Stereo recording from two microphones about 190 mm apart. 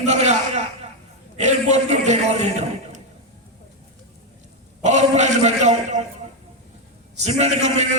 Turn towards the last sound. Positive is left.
turn(degrees=-35)  # may be behind; listen again after turning